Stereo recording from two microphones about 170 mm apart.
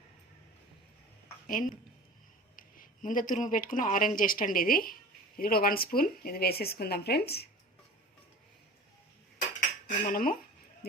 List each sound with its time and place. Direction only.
1.5 s a woman's voice: 50° left (ahead or behind); by 7.4 s 70° left (ahead or behind)
10.1 s speech: 60° left (ahead or behind)